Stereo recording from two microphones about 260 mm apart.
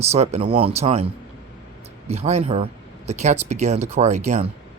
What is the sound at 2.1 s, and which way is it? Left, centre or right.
Speech, right.